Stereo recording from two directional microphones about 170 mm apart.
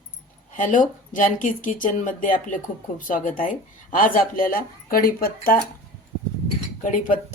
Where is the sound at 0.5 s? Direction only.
50° left (ahead or behind).